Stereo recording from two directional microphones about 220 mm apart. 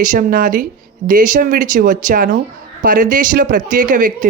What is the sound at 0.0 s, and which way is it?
Speech, 40° right (ahead or behind).